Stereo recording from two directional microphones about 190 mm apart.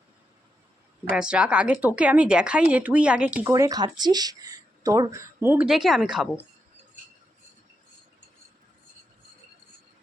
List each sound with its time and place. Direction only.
1.1 s speech: 5° right (ahead or behind)
3.5 s speech: 20° right (ahead or behind); by 6.4 s 5° right (ahead or behind)